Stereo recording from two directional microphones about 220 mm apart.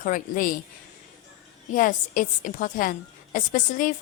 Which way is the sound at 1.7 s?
35° left (ahead or behind).